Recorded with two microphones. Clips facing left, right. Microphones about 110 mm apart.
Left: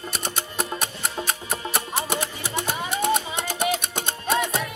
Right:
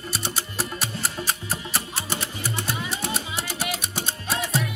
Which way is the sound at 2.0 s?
70° left (ahead or behind).